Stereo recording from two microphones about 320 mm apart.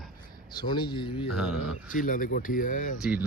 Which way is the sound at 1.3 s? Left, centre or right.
Centre.